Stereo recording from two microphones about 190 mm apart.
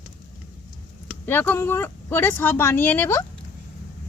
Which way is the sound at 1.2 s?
10° left (ahead or behind).